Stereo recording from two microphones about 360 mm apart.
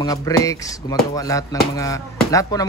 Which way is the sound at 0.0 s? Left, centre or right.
Centre.